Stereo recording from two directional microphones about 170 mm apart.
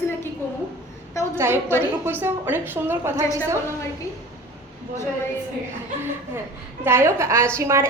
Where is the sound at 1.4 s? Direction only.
15° right (ahead or behind).